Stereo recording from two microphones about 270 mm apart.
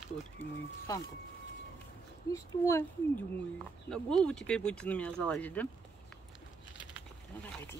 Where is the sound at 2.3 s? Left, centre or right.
Centre.